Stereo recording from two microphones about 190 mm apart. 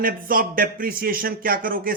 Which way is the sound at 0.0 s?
50° right (ahead or behind).